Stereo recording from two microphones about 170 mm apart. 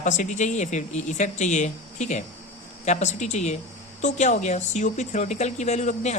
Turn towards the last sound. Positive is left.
turn(degrees=45)  # may be behind; listen again after turning